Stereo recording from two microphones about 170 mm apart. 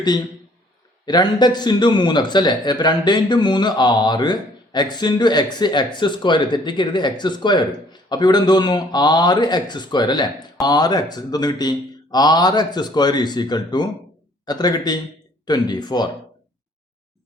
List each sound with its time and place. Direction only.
1.0 s speech: 25° left (ahead or behind)